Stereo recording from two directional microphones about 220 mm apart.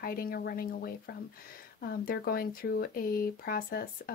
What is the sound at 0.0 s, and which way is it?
Speech, 40° left (ahead or behind).